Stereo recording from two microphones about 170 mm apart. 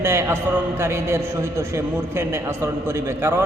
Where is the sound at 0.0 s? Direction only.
15° right (ahead or behind).